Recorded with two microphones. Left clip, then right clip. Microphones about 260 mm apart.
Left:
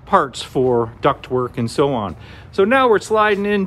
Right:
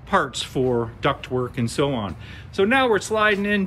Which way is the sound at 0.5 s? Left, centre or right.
Left.